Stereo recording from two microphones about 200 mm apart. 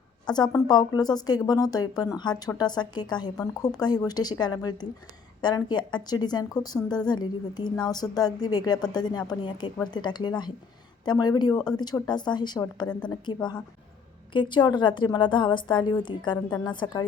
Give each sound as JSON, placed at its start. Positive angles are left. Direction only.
{"t": 0.3, "sound": "speech", "side_deg": 20}